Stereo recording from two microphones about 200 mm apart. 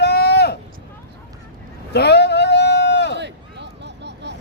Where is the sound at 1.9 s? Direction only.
55° left (ahead or behind).